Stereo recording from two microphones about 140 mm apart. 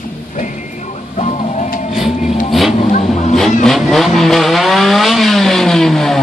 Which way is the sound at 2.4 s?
Centre (ahead or behind).